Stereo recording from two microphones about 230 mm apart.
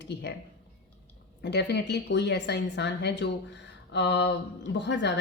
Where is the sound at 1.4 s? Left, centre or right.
Left.